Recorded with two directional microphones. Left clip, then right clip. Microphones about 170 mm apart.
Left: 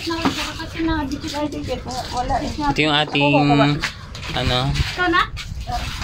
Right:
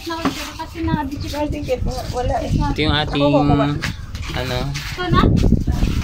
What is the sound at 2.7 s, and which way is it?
Speech, centre (ahead or behind).